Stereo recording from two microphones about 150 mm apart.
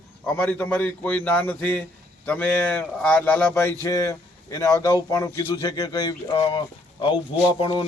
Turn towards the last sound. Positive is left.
turn(degrees=35)  # may be behind; listen again after turning